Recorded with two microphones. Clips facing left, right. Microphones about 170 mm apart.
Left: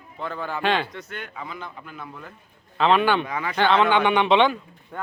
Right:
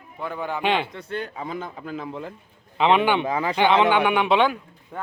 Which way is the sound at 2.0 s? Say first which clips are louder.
Right 7 dB; 25° right (ahead or behind).